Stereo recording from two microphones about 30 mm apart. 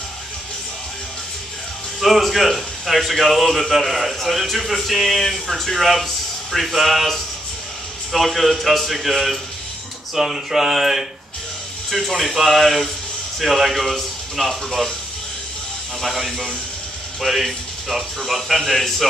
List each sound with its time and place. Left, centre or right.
2.0 s a man's voice: centre
12.2 s a man's voice: centre
16.0 s a man's voice: centre